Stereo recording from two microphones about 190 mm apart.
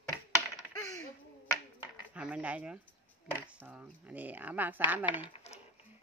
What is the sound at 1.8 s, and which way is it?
Speech, 5° right (ahead or behind).